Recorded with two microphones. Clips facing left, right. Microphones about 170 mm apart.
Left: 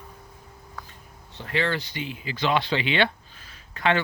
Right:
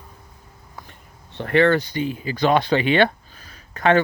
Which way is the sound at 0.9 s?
60° right (ahead or behind).